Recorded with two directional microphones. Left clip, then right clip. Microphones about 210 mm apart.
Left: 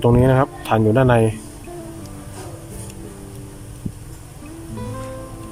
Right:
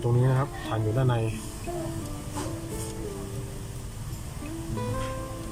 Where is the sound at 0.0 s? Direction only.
50° left (ahead or behind).